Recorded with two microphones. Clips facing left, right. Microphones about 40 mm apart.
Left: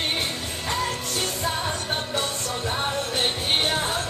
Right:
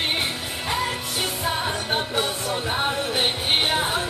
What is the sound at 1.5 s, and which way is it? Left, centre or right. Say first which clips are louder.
Music: right 2 dB; centre.